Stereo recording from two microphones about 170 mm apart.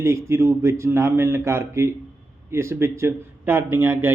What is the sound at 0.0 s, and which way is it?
A man's voice, 15° right (ahead or behind).